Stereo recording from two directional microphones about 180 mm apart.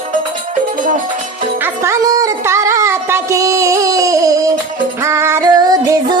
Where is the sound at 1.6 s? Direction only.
20° right (ahead or behind).